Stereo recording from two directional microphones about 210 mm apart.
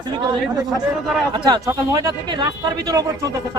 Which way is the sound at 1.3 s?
20° right (ahead or behind).